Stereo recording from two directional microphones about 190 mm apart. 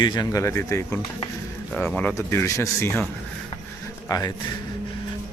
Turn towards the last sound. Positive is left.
turn(degrees=20)  # may be behind; listen again after turning